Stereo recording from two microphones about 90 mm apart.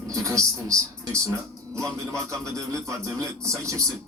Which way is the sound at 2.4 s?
35° right (ahead or behind).